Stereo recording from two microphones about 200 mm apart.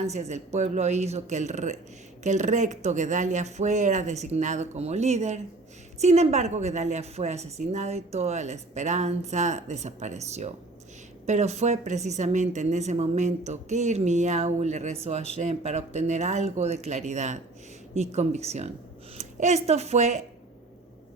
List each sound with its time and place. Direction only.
0.0 s a woman's voice: 35° right (ahead or behind)